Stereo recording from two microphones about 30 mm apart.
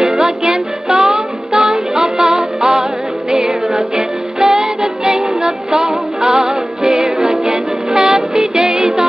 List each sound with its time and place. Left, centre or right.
0.2 s music: right